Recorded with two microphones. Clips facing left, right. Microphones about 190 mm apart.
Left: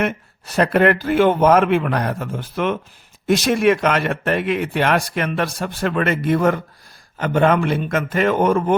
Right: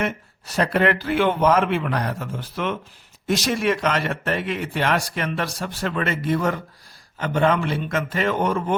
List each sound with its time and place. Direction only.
0.0 s speech: 55° left (ahead or behind)